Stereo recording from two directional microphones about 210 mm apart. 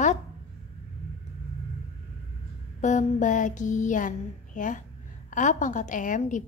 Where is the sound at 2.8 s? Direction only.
35° left (ahead or behind).